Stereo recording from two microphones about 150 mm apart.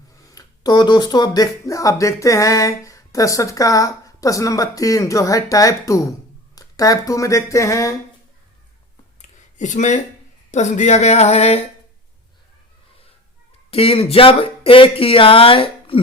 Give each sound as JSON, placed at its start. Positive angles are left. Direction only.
{"t": 0.2, "sound": "speech", "side_deg": 25}
{"t": 9.6, "sound": "a sound", "side_deg": 55}
{"t": 13.7, "sound": "speech", "side_deg": 40}